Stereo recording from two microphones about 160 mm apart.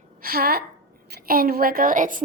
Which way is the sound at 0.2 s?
70° right (ahead or behind).